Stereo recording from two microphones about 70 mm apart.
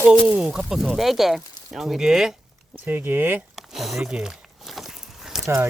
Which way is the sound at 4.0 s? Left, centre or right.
Centre.